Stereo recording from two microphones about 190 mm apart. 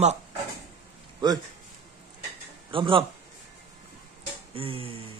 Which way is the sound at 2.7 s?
25° right (ahead or behind).